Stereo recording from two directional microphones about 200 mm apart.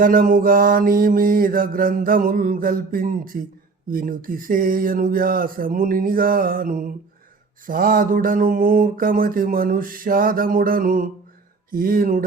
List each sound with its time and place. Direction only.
0.0 s mantra: 45° right (ahead or behind)